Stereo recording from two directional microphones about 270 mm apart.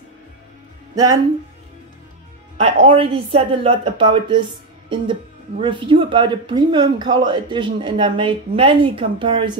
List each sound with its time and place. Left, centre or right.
0.9 s speech: centre
2.5 s a woman's voice: right
5.6 s speech: centre